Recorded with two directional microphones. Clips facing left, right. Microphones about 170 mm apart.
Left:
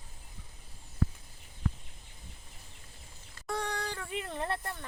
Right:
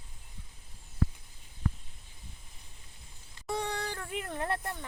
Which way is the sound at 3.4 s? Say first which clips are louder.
Right 1 dB; 10° right (ahead or behind).